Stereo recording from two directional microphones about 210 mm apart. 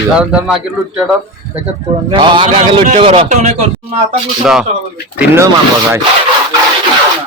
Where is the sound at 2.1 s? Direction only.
25° right (ahead or behind).